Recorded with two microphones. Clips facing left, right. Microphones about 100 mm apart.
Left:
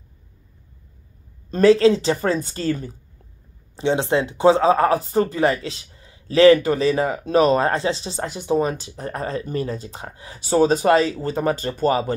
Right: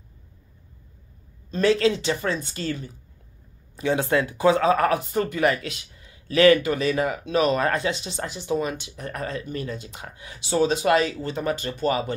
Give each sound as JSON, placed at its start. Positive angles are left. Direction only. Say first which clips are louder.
{"t": 1.5, "sound": "speech", "louder": "left 6 dB", "side_deg": 35}
{"t": 3.7, "sound": "speech", "louder": "left 2 dB", "side_deg": 25}